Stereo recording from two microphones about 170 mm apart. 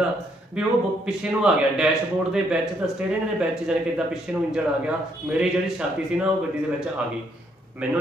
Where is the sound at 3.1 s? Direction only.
5° right (ahead or behind).